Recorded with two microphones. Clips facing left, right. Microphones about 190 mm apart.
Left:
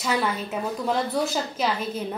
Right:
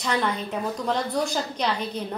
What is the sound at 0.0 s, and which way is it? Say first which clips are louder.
A woman's voice: even; 5° left (ahead or behind).